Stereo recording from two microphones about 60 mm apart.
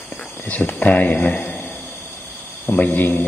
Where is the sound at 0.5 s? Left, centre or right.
Left.